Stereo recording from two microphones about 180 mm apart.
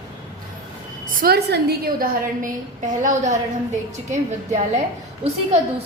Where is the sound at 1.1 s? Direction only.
60° right (ahead or behind).